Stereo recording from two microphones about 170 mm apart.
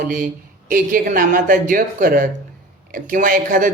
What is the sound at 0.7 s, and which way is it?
Speech, 55° right (ahead or behind).